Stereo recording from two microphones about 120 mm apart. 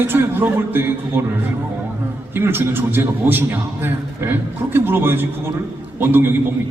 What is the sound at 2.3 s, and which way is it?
A man's voice, 20° right (ahead or behind).